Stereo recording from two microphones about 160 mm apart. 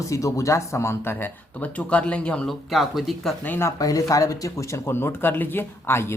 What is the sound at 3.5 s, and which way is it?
Speech, 20° left (ahead or behind).